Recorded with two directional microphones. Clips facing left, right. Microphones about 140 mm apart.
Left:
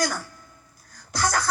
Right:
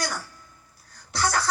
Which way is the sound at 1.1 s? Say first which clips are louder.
Even; 45° left (ahead or behind).